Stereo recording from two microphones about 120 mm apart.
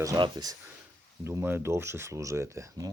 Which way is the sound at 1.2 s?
20° right (ahead or behind).